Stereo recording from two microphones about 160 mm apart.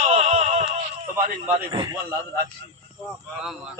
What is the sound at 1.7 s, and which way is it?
Speech, 25° right (ahead or behind).